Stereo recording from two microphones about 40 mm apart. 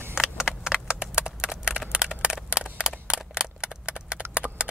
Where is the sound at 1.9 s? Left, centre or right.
Centre.